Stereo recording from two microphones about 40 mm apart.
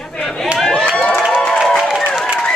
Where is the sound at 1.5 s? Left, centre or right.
Centre.